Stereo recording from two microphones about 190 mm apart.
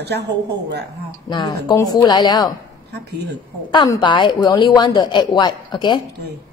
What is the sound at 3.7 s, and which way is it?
A woman's voice, 20° left (ahead or behind).